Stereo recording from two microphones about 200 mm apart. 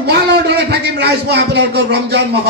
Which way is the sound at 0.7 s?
55° right (ahead or behind).